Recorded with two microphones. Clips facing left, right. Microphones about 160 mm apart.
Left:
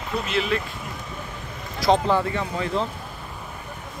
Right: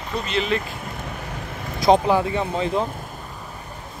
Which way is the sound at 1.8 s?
15° right (ahead or behind).